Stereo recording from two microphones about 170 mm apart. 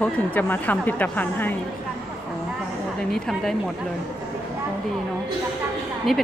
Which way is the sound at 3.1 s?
Centre (ahead or behind).